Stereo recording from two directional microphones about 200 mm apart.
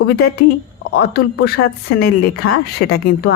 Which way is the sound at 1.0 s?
55° left (ahead or behind).